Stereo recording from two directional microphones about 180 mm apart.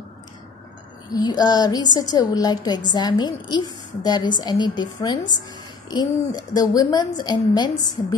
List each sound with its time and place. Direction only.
1.1 s a woman's voice: 20° left (ahead or behind)